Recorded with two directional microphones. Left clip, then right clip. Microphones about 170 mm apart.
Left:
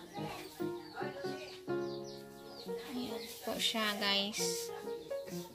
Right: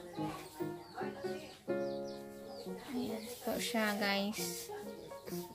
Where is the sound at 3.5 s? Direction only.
10° right (ahead or behind).